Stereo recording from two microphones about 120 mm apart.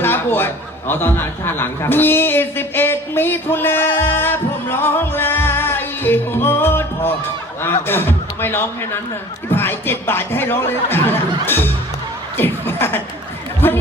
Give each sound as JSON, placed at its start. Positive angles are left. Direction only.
{"t": 0.0, "sound": "a man's voice", "side_deg": 20}
{"t": 12.4, "sound": "chuckle", "side_deg": 20}
{"t": 13.6, "sound": "speech", "side_deg": 15}